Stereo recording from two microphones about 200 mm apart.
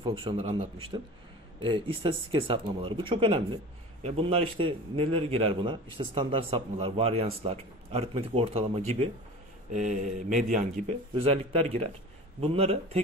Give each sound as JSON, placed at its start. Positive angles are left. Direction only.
{"t": 0.0, "sound": "a man's voice", "side_deg": -25}